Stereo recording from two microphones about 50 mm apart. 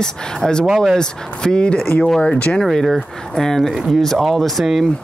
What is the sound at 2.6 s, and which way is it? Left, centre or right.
Speech, centre.